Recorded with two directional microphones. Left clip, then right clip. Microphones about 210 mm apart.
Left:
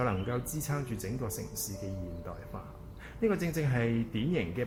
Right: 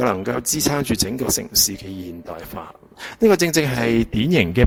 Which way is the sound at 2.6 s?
50° right (ahead or behind).